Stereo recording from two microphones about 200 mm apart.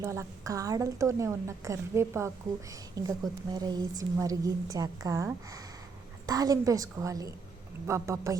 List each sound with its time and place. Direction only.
0.0 s a woman's voice: 15° right (ahead or behind)